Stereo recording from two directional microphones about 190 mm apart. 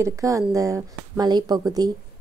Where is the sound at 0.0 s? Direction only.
15° right (ahead or behind).